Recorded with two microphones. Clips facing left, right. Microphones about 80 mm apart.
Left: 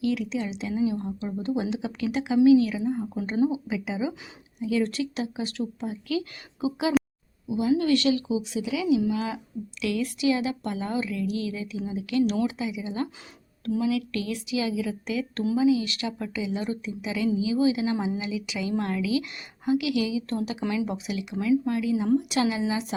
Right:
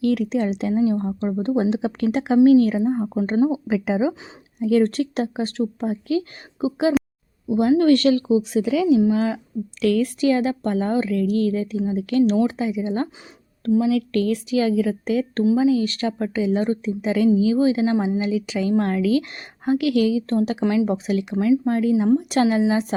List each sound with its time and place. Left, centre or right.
0.0 s a woman's voice: right
3.8 s a woman's voice: right
6.1 s speech: right
7.4 s a woman's voice: right
9.0 s a woman's voice: right